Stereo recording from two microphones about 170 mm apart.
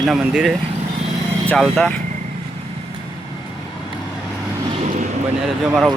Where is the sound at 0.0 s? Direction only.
5° right (ahead or behind).